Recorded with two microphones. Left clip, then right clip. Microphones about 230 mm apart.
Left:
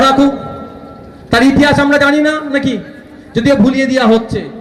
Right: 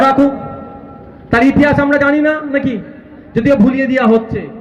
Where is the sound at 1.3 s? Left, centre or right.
Left.